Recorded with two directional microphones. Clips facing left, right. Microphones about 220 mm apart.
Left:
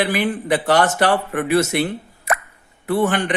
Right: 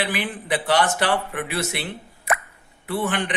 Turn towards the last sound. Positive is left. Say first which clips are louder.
# left 6 dB
turn(degrees=45)  # may be behind; listen again after turning